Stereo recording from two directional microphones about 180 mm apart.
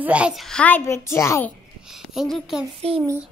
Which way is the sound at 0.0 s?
5° right (ahead or behind).